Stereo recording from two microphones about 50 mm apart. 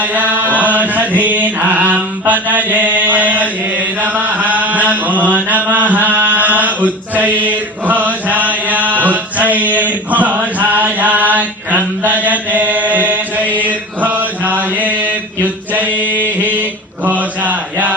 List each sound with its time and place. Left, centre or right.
0.0 s mantra: right
7.4 s chant: right
13.6 s mantra: right
17.1 s a sound: right